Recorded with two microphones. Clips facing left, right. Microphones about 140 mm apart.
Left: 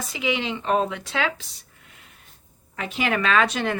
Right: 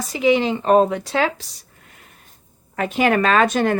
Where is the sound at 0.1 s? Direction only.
40° right (ahead or behind).